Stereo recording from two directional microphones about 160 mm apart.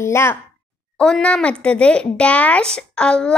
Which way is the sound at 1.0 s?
5° left (ahead or behind).